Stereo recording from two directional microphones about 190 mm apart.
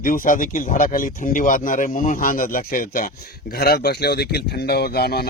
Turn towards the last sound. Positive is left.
turn(degrees=55)  # may be behind; listen again after turning